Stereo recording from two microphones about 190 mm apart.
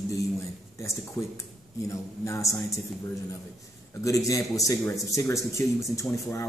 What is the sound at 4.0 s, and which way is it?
A man's voice, 15° left (ahead or behind).